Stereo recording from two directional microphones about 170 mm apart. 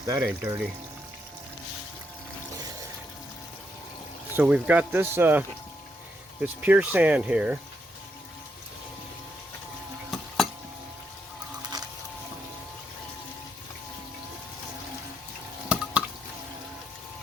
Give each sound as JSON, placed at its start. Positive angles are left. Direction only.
{"t": 0.0, "sound": "speech", "side_deg": -15}
{"t": 4.4, "sound": "speech", "side_deg": -5}
{"t": 10.1, "sound": "a sound", "side_deg": 0}
{"t": 15.7, "sound": "drip", "side_deg": -5}